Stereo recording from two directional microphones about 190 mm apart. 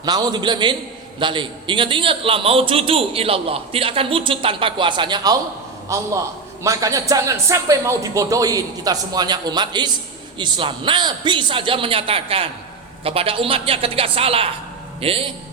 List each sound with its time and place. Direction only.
0.0 s a man's voice: 20° right (ahead or behind)